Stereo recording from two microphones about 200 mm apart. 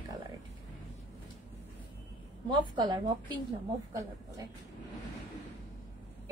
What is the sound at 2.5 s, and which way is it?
Speech, 20° right (ahead or behind).